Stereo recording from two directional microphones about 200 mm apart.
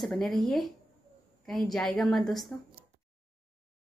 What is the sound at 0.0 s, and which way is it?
Speech, centre (ahead or behind).